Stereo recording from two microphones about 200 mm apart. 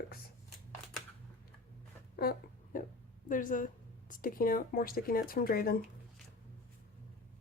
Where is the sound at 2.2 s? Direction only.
50° left (ahead or behind).